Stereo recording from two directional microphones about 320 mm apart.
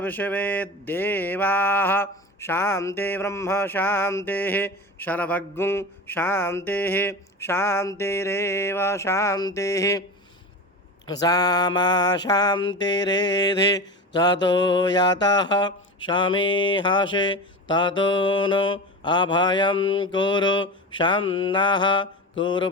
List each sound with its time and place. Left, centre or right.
0.0 s mantra: centre
11.0 s mantra: centre
19.7 s mantra: left
20.1 s mantra: centre